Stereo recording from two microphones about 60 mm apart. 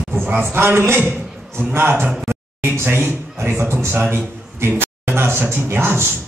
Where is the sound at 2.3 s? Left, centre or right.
Right.